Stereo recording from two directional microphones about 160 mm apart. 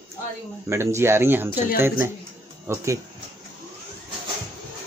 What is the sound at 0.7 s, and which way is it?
Speech, 15° right (ahead or behind).